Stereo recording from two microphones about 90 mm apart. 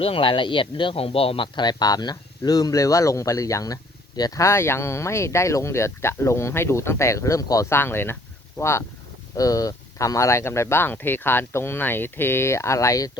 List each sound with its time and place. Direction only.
0.0 s speech: 85° left; by 7.7 s 40° left (ahead or behind)
7.7 s speech: 25° left (ahead or behind)
9.3 s speech: 40° left (ahead or behind)